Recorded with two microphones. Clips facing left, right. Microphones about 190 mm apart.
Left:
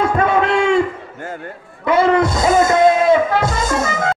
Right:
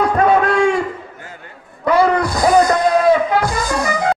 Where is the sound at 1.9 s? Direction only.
25° left (ahead or behind).